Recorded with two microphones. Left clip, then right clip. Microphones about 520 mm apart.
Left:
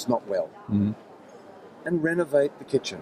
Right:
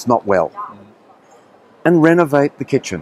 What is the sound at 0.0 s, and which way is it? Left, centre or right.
Speech, right.